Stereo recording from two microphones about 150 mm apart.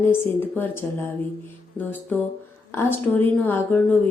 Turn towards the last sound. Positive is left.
turn(degrees=10)  # may be behind; listen again after turning